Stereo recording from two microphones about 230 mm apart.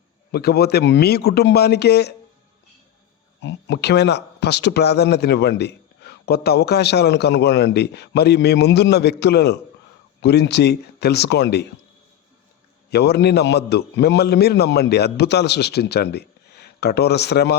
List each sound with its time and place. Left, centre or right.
0.3 s speech: left
3.4 s speech: left
12.9 s speech: left